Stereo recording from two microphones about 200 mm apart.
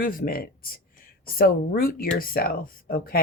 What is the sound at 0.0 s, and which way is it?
Speech, 45° left (ahead or behind).